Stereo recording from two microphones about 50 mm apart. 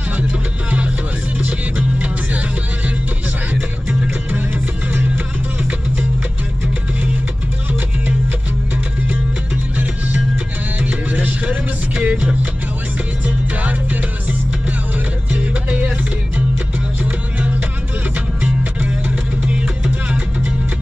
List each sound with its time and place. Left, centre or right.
0.7 s music: right
5.6 s music: right
9.8 s music: right
15.4 s music: right
17.0 s music: right